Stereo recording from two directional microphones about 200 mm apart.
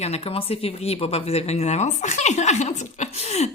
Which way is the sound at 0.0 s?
30° left (ahead or behind).